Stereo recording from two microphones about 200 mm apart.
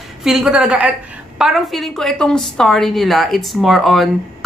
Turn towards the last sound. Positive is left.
turn(degrees=0)  # may be behind; listen again after turning